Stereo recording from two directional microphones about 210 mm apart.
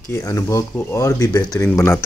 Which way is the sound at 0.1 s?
15° left (ahead or behind).